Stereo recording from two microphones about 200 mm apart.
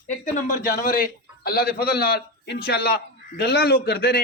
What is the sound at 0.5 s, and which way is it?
A man's voice, 45° left (ahead or behind).